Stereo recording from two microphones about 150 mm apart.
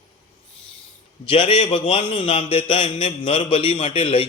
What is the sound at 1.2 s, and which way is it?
A man's voice, 40° left (ahead or behind).